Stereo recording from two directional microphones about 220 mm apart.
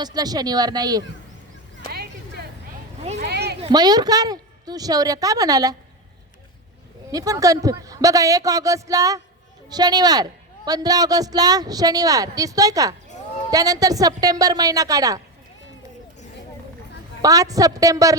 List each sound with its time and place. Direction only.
0.0 s speech: 20° right (ahead or behind)
1.9 s a sound: 45° right (ahead or behind)
3.2 s speech: 50° right (ahead or behind)
3.6 s speech: 20° right (ahead or behind)
7.1 s speech: 15° right (ahead or behind)
17.2 s speech: 15° right (ahead or behind)